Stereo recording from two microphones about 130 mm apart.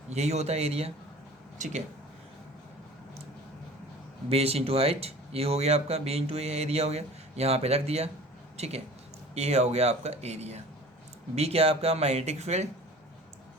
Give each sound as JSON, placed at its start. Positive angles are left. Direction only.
{"t": 0.1, "sound": "speech", "side_deg": -60}
{"t": 1.5, "sound": "speech", "side_deg": -70}
{"t": 4.3, "sound": "speech", "side_deg": -50}